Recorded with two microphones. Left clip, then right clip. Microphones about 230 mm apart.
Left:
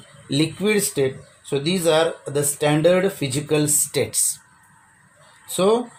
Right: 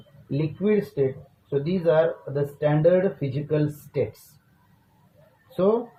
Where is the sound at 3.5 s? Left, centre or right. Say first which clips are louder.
Left 5 dB; left.